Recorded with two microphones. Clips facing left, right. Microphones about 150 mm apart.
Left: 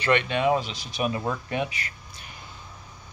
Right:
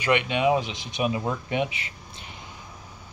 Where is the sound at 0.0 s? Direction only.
10° right (ahead or behind).